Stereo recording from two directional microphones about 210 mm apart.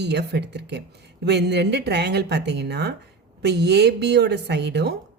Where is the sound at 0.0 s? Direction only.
55° right (ahead or behind).